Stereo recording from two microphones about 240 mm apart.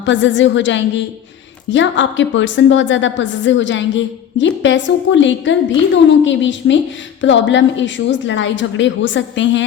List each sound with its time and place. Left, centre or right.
0.0 s a woman's voice: left